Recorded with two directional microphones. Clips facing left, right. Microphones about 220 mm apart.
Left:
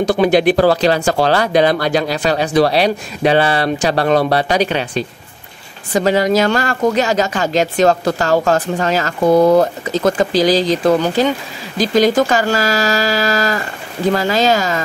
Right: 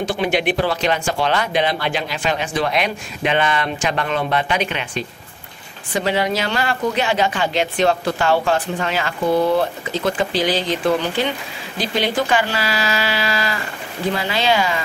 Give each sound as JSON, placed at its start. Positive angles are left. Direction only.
{"t": 0.0, "sound": "speech", "side_deg": 40}